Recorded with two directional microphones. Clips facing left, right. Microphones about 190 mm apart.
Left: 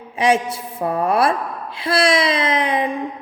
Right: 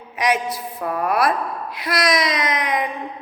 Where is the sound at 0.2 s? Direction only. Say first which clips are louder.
Left 4 dB; 25° left (ahead or behind).